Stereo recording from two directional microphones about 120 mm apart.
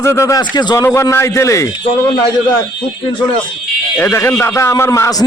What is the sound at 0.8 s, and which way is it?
Speech, 25° left (ahead or behind).